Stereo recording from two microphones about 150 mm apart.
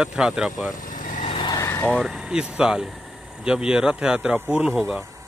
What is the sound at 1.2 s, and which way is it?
Vehicle, 35° left (ahead or behind).